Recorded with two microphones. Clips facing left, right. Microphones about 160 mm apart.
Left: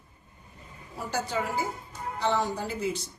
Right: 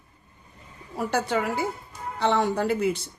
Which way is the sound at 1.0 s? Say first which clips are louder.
Right 5 dB; 60° right (ahead or behind).